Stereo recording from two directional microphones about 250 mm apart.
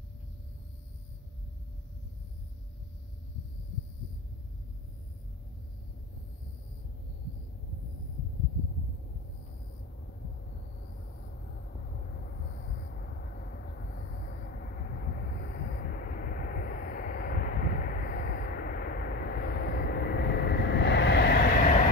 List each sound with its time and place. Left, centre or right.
14.6 s vehicle: left